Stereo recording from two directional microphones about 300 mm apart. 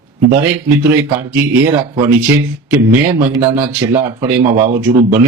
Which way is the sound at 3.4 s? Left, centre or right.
Centre.